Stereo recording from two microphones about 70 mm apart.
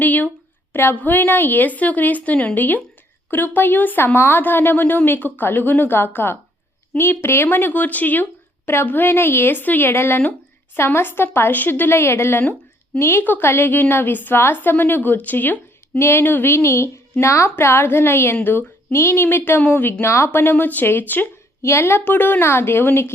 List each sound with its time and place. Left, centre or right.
0.0 s a sound: left
0.7 s a woman's voice: left
13.0 s a woman's voice: left
13.2 s a woman's voice: left
18.9 s a woman's voice: left
21.6 s a woman's voice: left